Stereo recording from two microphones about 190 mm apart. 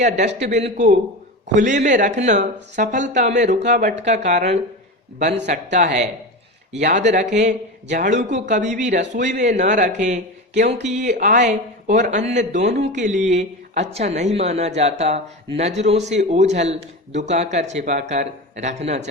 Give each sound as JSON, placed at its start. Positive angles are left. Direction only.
{"t": 0.0, "sound": "a woman's voice", "side_deg": -40}